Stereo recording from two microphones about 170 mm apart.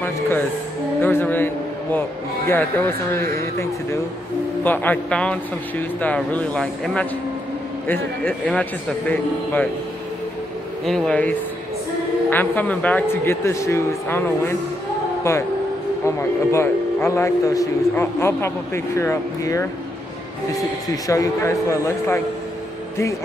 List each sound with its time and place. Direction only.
1.0 s a sound: 10° left (ahead or behind)
3.2 s a man's voice: 15° left (ahead or behind)
10.9 s a man's voice: 5° left (ahead or behind)